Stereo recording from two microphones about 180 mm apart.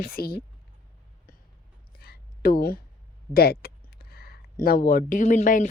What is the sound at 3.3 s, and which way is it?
Speech, 60° left (ahead or behind).